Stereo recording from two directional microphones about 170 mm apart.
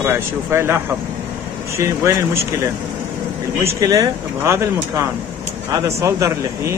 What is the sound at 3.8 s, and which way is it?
Speech, 20° right (ahead or behind).